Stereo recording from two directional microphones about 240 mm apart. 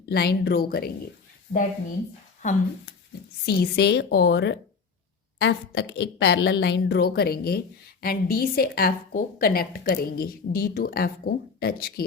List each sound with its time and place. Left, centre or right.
0.0 s a woman's voice: left
1.5 s a woman's voice: left
3.4 s a woman's voice: left